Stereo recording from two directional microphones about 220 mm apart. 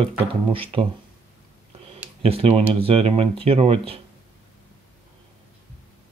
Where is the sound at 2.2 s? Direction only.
25° right (ahead or behind).